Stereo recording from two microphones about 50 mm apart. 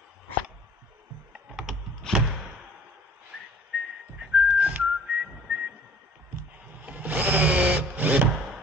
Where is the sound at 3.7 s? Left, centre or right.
Right.